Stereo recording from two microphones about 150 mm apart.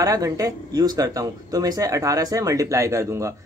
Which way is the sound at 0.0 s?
25° right (ahead or behind).